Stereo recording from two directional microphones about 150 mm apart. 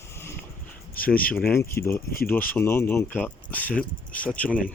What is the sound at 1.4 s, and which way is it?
Speech, 15° left (ahead or behind).